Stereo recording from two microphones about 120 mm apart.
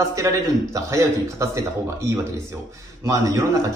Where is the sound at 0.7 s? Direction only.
25° right (ahead or behind).